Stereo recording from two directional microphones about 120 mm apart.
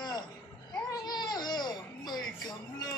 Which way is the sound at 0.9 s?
35° left (ahead or behind).